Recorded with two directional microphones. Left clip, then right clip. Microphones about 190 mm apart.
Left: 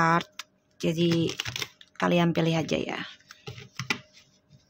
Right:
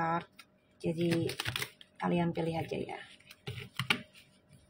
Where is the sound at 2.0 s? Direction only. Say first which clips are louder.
Left 9 dB; 30° left (ahead or behind).